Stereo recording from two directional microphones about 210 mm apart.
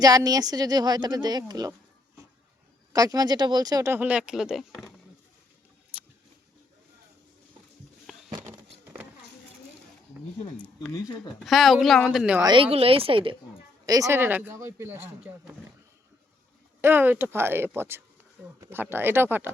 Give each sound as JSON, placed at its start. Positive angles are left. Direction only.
{"t": 0.0, "sound": "a woman's voice", "side_deg": -15}
{"t": 2.9, "sound": "speech", "side_deg": -15}
{"t": 8.3, "sound": "a sound", "side_deg": -15}
{"t": 10.6, "sound": "speech", "side_deg": 5}
{"t": 12.4, "sound": "a woman's voice", "side_deg": -20}
{"t": 16.8, "sound": "speech", "side_deg": -10}